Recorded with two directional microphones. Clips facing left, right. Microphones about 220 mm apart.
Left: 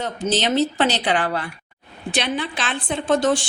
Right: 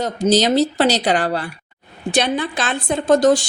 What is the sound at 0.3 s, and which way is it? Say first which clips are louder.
A woman's voice: right 5 dB; 40° right (ahead or behind).